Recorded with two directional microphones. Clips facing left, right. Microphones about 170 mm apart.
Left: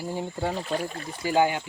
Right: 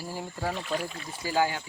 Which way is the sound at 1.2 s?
20° left (ahead or behind).